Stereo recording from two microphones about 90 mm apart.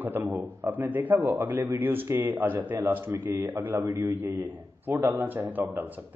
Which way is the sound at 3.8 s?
35° right (ahead or behind).